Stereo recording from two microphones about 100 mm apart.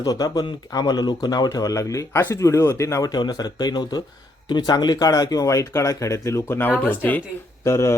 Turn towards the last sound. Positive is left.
turn(degrees=25)  # may be behind; listen again after turning